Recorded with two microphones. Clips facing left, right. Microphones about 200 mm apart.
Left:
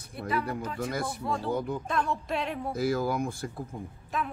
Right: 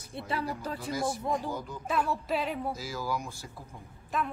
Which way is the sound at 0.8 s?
60° left (ahead or behind).